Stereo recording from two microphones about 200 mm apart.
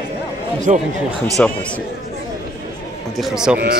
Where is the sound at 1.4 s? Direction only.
5° left (ahead or behind).